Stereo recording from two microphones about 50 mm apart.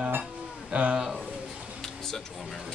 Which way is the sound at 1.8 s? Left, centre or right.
Centre.